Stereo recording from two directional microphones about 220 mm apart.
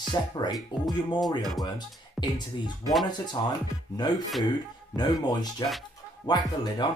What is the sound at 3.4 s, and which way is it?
Speech, 20° left (ahead or behind).